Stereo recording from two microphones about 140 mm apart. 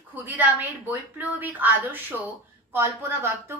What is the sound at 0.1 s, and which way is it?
Speech, 15° right (ahead or behind).